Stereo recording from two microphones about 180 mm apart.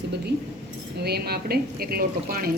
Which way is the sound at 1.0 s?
60° right (ahead or behind).